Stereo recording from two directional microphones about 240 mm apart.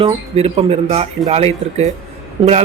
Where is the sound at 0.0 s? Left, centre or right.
Right.